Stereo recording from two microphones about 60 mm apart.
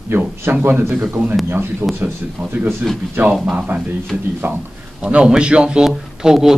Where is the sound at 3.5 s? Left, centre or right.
Right.